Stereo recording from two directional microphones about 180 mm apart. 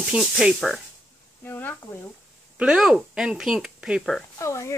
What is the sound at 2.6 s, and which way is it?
Speech, 5° right (ahead or behind).